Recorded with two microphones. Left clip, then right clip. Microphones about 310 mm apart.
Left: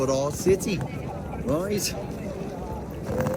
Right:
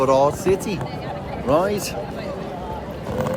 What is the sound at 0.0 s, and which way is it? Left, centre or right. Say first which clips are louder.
Speech: right 8 dB; centre.